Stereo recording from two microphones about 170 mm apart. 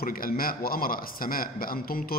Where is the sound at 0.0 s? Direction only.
60° left (ahead or behind).